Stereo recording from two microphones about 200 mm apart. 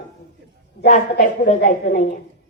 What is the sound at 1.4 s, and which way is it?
Speech, 40° left (ahead or behind).